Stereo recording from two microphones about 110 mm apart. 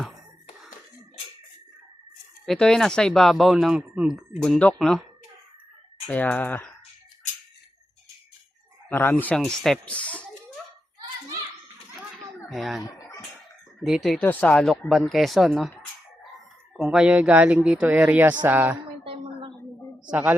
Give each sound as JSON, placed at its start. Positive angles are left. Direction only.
{"t": 2.5, "sound": "speech", "side_deg": 5}
{"t": 6.1, "sound": "speech", "side_deg": 15}
{"t": 8.9, "sound": "speech", "side_deg": 20}
{"t": 9.3, "sound": "speech", "side_deg": 5}
{"t": 12.5, "sound": "speech", "side_deg": 0}
{"t": 13.8, "sound": "speech", "side_deg": -5}
{"t": 14.1, "sound": "speech", "side_deg": 10}
{"t": 19.0, "sound": "a sound", "side_deg": -50}
{"t": 20.1, "sound": "speech", "side_deg": -15}